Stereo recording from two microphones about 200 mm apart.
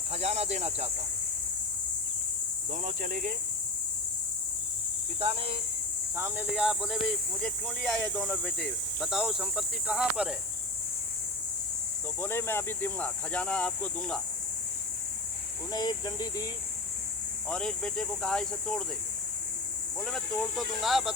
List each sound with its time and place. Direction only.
0.1 s speech: 30° right (ahead or behind)
2.8 s speech: 40° right (ahead or behind)
5.2 s speech: 30° right (ahead or behind)
6.1 s speech: 10° right (ahead or behind)
12.2 s speech: 10° left (ahead or behind)
15.7 s speech: 20° left (ahead or behind)
17.5 s speech: 5° left (ahead or behind)
20.0 s speech: 5° left (ahead or behind)